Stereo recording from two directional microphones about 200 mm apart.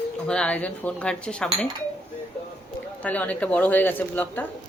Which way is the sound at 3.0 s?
10° left (ahead or behind).